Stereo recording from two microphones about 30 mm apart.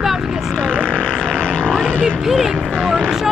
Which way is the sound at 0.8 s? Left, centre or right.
Left.